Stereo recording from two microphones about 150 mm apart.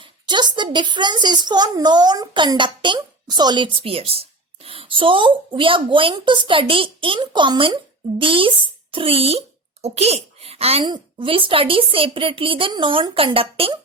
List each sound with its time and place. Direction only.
0.0 s a child's voice: 30° right (ahead or behind)